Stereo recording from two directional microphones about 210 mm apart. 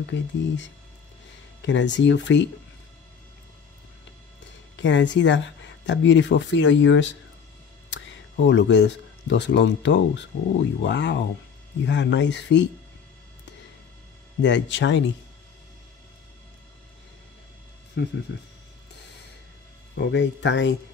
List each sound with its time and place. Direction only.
0.0 s speech: 60° left (ahead or behind)
4.7 s speech: 60° left (ahead or behind)
14.4 s speech: 60° left (ahead or behind)
20.0 s speech: 55° left (ahead or behind)